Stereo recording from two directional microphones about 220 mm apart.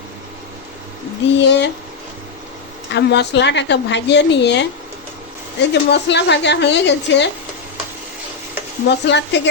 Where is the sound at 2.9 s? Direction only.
50° left (ahead or behind).